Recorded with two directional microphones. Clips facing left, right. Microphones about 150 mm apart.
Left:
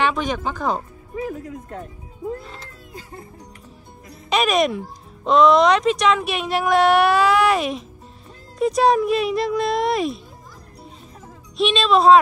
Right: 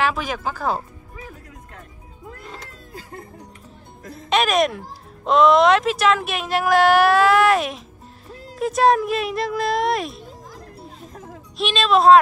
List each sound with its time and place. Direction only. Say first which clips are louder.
0.0 s a child's voice: left 1 dB; 5° right (ahead or behind)
1.2 s speech: left 13 dB; 40° left (ahead or behind)
4.3 s a child's voice: even; centre (ahead or behind)
10.8 s music: right 3 dB; centre (ahead or behind)